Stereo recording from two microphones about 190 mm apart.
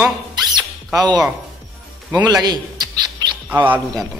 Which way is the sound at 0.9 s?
20° right (ahead or behind).